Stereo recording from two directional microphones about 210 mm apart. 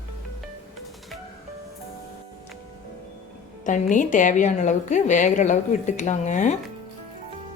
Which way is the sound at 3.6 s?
35° left (ahead or behind).